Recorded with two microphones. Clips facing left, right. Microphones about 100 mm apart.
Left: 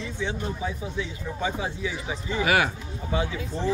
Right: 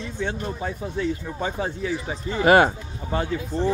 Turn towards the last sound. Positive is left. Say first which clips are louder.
# right 2 dB
turn(degrees=-50)  # may be behind; listen again after turning